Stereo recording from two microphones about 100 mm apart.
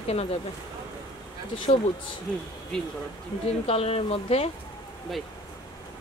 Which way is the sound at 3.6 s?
90° left.